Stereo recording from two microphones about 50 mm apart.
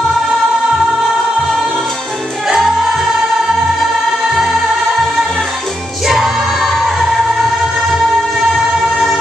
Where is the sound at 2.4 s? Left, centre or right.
Centre.